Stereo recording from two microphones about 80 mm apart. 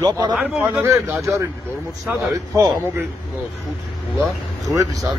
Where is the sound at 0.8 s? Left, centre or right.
Right.